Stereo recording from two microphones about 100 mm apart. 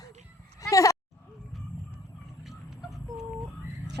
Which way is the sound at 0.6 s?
35° left (ahead or behind).